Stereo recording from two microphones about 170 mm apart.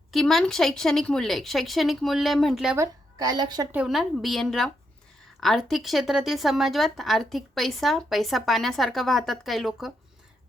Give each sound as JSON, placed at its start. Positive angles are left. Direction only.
{"t": 0.1, "sound": "a woman's voice", "side_deg": 0}
{"t": 2.7, "sound": "a woman's voice", "side_deg": -20}
{"t": 3.7, "sound": "a woman's voice", "side_deg": -5}